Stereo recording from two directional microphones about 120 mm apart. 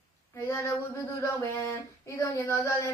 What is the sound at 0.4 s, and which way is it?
Speech, 25° left (ahead or behind).